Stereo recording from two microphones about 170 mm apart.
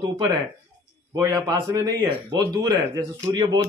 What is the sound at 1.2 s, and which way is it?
Speech, 20° right (ahead or behind).